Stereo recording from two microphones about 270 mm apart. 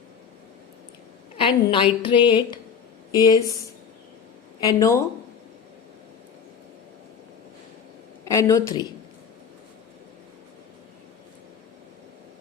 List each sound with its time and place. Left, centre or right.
1.4 s a woman's voice: centre
4.6 s a woman's voice: centre
8.2 s a woman's voice: centre